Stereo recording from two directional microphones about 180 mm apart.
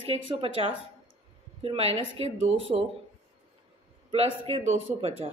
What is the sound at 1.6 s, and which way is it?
Speech, 35° right (ahead or behind).